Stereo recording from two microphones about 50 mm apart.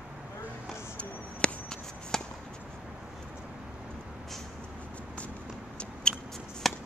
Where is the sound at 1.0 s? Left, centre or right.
Centre.